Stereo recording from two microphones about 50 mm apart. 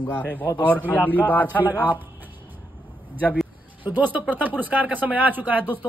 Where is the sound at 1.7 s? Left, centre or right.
Right.